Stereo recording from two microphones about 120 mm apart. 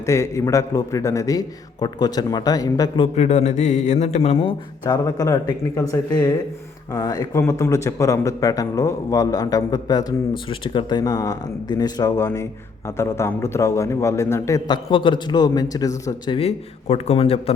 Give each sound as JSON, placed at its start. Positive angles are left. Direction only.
{"t": 0.0, "sound": "speech", "side_deg": 25}
{"t": 3.2, "sound": "a man's voice", "side_deg": 70}
{"t": 4.9, "sound": "speech", "side_deg": 30}
{"t": 10.5, "sound": "speech", "side_deg": 45}
{"t": 14.7, "sound": "speech", "side_deg": 40}
{"t": 16.4, "sound": "a man's voice", "side_deg": 60}